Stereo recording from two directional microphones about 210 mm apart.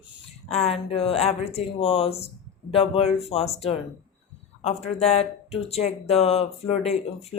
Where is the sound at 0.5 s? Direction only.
30° left (ahead or behind).